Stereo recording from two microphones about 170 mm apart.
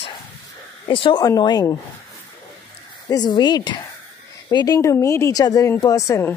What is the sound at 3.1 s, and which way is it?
A woman's voice, 25° left (ahead or behind).